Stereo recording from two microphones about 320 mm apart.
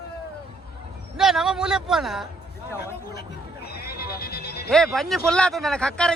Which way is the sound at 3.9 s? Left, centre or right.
Left.